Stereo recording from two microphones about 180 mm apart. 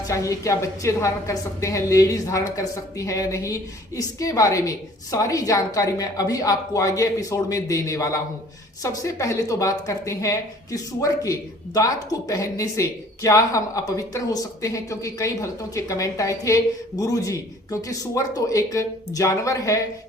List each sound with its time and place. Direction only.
0.1 s a woman's voice: 15° left (ahead or behind)